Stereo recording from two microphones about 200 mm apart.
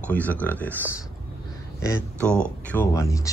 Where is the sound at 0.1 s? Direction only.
10° left (ahead or behind).